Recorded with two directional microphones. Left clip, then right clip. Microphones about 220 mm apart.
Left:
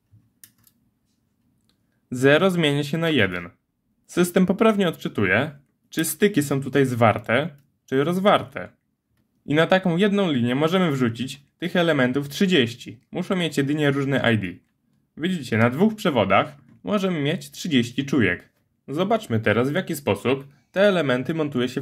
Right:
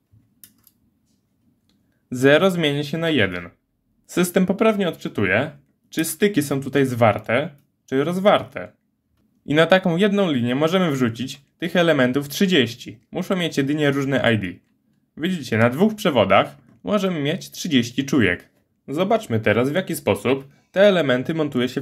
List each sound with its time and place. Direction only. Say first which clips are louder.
2.0 s speech: right 2 dB; centre (ahead or behind)